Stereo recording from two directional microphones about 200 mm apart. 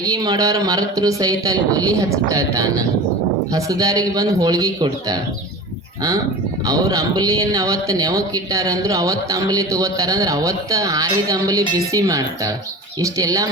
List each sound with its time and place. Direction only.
0.0 s speech: 20° right (ahead or behind)
6.7 s speech: 15° right (ahead or behind)